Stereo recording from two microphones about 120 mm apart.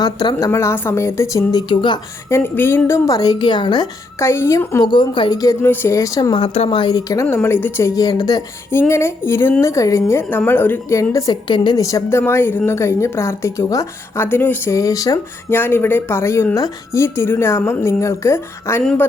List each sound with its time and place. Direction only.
0.0 s a woman's voice: 35° left (ahead or behind)
1.7 s a woman's voice: 40° left (ahead or behind)
2.3 s a woman's voice: 20° left (ahead or behind); by 3.8 s 40° left (ahead or behind)
4.2 s a woman's voice: 20° left (ahead or behind)
4.8 s a woman's voice: 40° left (ahead or behind)
5.6 s a woman's voice: 20° left (ahead or behind)
6.3 s speech: 50° left (ahead or behind)
6.9 s a woman's voice: 25° left (ahead or behind)
7.3 s a woman's voice: 15° left (ahead or behind)
8.7 s a woman's voice: 20° left (ahead or behind)
11.4 s a woman's voice: 40° left (ahead or behind)
15.5 s a woman's voice: 20° left (ahead or behind)